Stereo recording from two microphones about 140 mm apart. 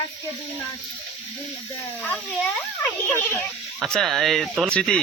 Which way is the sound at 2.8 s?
15° left (ahead or behind).